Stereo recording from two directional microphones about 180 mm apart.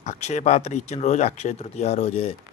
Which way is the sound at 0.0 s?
40° left (ahead or behind).